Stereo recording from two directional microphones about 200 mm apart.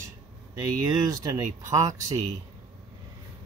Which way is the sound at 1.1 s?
20° right (ahead or behind).